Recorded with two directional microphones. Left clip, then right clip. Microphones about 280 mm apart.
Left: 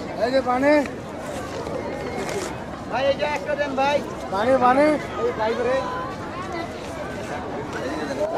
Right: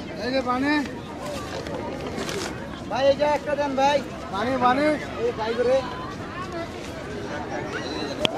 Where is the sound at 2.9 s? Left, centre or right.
Left.